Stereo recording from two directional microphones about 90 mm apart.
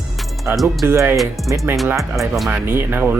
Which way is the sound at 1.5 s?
35° right (ahead or behind).